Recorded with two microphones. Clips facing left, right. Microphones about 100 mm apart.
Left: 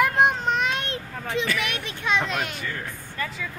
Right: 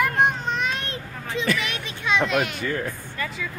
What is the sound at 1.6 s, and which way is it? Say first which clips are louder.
Speech: even; 60° left (ahead or behind).